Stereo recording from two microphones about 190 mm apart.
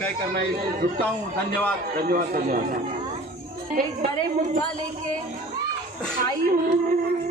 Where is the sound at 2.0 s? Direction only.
50° right (ahead or behind).